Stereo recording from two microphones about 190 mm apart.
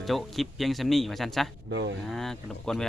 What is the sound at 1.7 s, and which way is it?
Speech, 70° right (ahead or behind).